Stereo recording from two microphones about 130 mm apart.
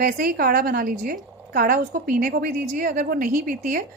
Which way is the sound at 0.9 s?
90° right.